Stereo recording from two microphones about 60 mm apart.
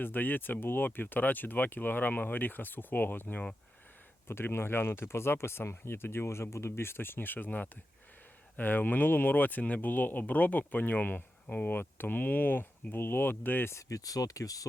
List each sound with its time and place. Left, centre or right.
0.0 s speech: left
13.7 s speech: left